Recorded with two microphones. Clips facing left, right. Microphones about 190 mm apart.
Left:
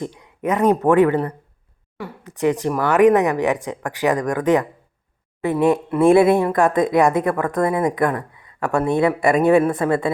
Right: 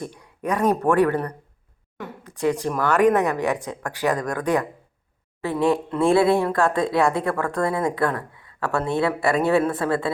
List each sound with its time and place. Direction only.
0.0 s a woman's voice: 20° left (ahead or behind)